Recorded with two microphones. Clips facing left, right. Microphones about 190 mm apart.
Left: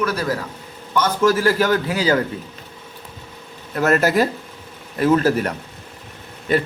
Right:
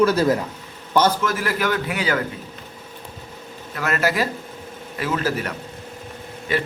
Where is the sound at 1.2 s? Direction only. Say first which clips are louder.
Left 6 dB; 30° left (ahead or behind).